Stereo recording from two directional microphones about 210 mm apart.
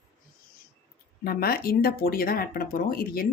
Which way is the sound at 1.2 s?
45° left (ahead or behind).